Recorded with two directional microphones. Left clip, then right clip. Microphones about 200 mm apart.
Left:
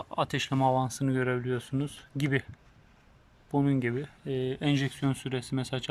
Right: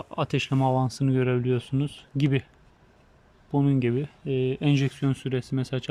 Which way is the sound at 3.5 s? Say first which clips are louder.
Right 3 dB; 5° right (ahead or behind).